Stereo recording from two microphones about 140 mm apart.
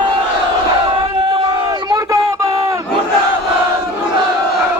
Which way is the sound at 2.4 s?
20° right (ahead or behind).